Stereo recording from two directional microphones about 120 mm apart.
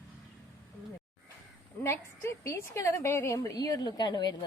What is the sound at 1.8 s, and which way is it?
A woman's voice, 20° left (ahead or behind).